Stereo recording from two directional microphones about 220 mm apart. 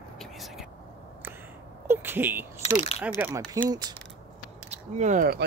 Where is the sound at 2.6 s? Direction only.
30° left (ahead or behind).